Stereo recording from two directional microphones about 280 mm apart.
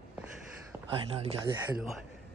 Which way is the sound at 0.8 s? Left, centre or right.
Centre.